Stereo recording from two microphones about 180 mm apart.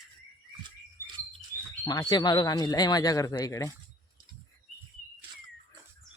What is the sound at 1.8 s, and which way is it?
Speech, 20° left (ahead or behind).